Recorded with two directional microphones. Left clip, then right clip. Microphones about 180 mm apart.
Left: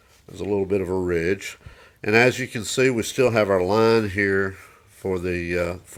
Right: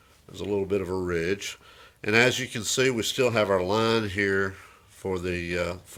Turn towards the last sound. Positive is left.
turn(degrees=30)  # may be behind; listen again after turning